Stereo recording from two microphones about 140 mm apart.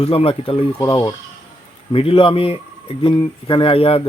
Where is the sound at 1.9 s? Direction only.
40° left (ahead or behind).